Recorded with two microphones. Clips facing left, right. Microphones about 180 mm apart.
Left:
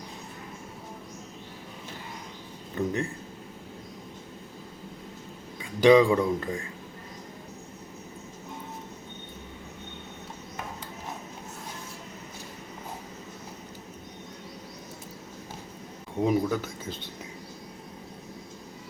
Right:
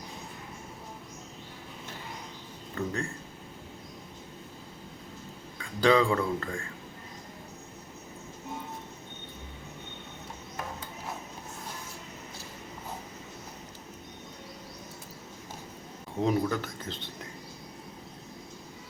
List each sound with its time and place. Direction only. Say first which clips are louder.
2.7 s speech: left 4 dB; 20° left (ahead or behind)
5.5 s speech: left 6 dB; 15° left (ahead or behind)
16.2 s speech: left 2 dB; 10° left (ahead or behind)